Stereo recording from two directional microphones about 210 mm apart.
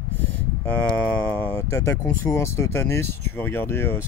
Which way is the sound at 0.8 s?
10° left (ahead or behind).